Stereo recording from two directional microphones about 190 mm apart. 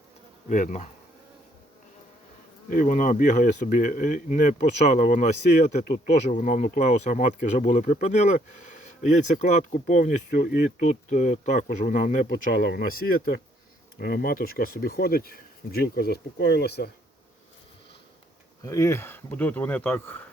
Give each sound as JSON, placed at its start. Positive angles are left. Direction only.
{"t": 0.4, "sound": "speech", "side_deg": 40}
{"t": 2.6, "sound": "speech", "side_deg": 45}
{"t": 18.6, "sound": "speech", "side_deg": 15}